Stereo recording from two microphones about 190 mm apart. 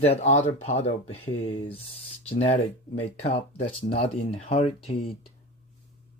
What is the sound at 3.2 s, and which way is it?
Speech, 35° left (ahead or behind).